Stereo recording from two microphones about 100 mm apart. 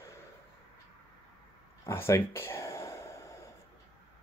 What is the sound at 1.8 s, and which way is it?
Speech, 25° left (ahead or behind).